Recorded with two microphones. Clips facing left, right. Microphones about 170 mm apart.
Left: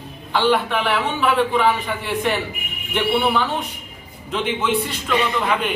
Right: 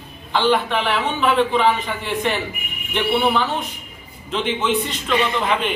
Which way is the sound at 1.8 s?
10° left (ahead or behind).